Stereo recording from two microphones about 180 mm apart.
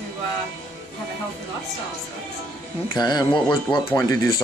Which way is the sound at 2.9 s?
25° left (ahead or behind).